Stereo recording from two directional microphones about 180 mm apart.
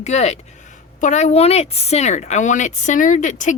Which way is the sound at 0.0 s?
40° left (ahead or behind).